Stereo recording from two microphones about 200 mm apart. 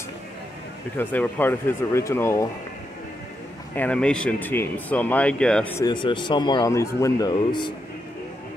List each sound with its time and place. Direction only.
0.9 s speech: 10° left (ahead or behind)
3.7 s speech: 5° left (ahead or behind)